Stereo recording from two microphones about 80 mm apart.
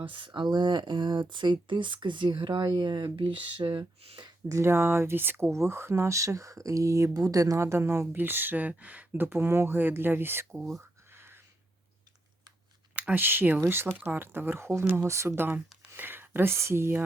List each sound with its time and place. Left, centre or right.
0.0 s speech: right
2.7 s speech: right
4.6 s speech: right
11.1 s a sound: right
13.0 s speech: right